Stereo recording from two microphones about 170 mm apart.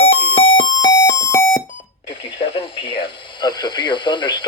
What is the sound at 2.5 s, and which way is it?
Radio, 30° left (ahead or behind).